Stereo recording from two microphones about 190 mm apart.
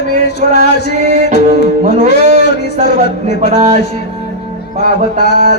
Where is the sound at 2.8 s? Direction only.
60° left (ahead or behind).